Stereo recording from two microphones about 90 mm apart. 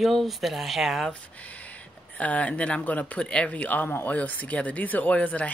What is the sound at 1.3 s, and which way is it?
Speech, 15° left (ahead or behind).